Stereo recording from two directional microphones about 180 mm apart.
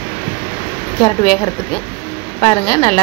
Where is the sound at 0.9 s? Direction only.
20° left (ahead or behind).